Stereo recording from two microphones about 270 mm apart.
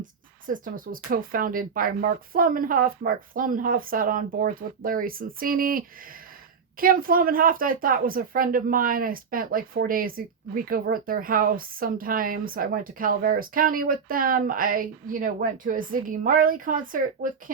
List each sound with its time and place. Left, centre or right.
0.0 s a woman's voice: right